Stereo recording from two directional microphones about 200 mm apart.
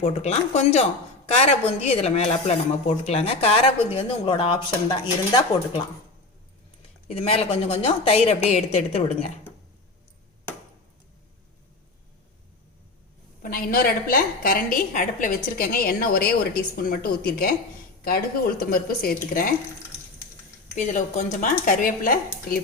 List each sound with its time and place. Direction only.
0.0 s speech: 35° left (ahead or behind)
7.1 s speech: 30° left (ahead or behind)
13.4 s a woman's voice: 45° left (ahead or behind)
18.6 s a woman's voice: 45° left (ahead or behind)
20.7 s speech: 40° left (ahead or behind)